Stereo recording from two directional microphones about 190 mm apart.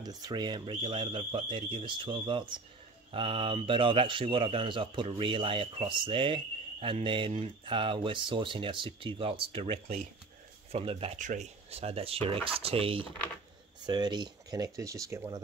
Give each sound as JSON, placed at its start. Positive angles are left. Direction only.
{"t": 0.0, "sound": "speech", "side_deg": -20}